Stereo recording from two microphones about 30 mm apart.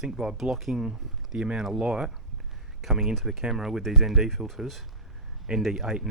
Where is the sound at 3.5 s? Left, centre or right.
Centre.